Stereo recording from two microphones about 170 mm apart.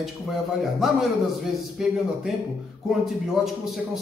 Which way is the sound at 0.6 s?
Centre (ahead or behind).